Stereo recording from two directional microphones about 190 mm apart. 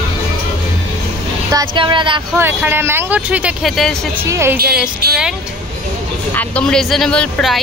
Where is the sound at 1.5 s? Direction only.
25° right (ahead or behind).